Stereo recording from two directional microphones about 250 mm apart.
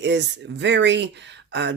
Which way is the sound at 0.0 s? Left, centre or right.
Right.